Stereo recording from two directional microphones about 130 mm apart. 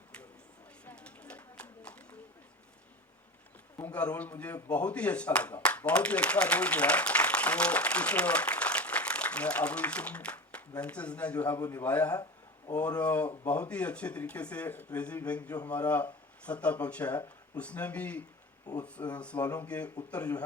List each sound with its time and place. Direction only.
0.9 s a sound: 10° left (ahead or behind)
3.8 s speech: 15° left (ahead or behind)
11.6 s speech: 25° left (ahead or behind)
11.9 s speech: 10° left (ahead or behind)